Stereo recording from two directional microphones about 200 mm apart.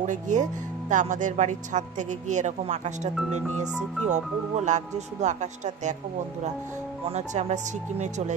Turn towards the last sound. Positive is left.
turn(degrees=-35)  # may be behind; listen again after turning